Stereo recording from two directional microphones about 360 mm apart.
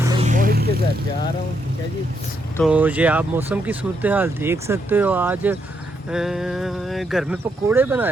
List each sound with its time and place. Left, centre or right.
0.0 s vehicle: centre
2.6 s speech: centre